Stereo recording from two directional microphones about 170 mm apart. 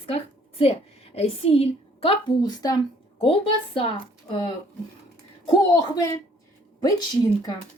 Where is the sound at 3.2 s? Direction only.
35° left (ahead or behind).